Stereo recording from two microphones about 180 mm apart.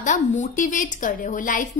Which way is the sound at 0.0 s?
45° left (ahead or behind).